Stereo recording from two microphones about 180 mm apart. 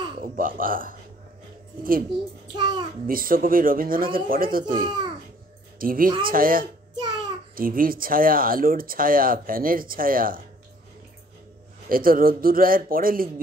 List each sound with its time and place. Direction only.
0.2 s speech: 50° right (ahead or behind)
2.5 s a child's voice: 25° right (ahead or behind)
3.1 s speech: 55° right (ahead or behind)
4.8 s a child's voice: 25° right (ahead or behind)
5.8 s speech: 50° right (ahead or behind)
11.9 s speech: 55° right (ahead or behind)